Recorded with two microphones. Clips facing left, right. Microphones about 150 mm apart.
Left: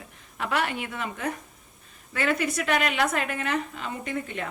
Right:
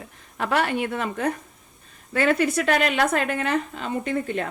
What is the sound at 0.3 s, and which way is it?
Speech, 40° right (ahead or behind).